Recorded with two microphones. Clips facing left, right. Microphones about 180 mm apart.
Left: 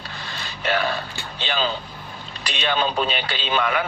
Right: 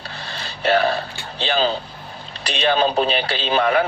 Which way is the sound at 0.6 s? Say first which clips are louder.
Right 6 dB; 35° right (ahead or behind).